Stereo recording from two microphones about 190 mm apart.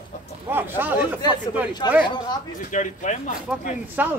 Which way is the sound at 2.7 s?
40° left (ahead or behind).